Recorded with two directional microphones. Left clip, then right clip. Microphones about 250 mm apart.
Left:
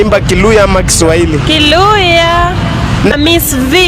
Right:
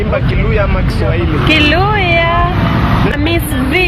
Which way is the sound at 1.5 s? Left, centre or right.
Left.